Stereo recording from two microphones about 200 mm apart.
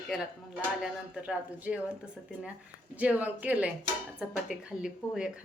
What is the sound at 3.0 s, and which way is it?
Speech, 5° right (ahead or behind).